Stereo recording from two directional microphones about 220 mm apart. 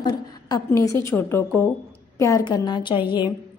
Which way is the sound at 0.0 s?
20° left (ahead or behind).